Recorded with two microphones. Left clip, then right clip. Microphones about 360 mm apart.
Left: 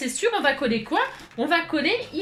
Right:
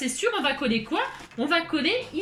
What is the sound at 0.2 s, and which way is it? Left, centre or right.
A woman's voice, centre.